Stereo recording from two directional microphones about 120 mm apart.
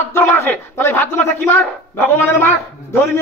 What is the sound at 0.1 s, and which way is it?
A man's voice, 20° left (ahead or behind).